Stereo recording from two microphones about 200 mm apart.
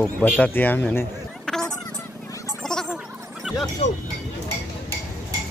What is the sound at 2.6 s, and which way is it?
Gargling, centre (ahead or behind).